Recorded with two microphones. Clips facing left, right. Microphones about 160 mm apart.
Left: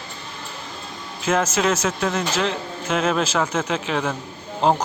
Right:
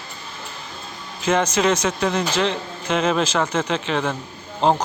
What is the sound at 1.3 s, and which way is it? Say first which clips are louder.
A man's voice: right 2 dB; 5° left (ahead or behind).